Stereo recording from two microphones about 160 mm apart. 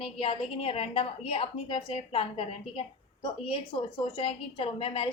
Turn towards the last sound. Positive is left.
turn(degrees=35)  # may be behind; listen again after turning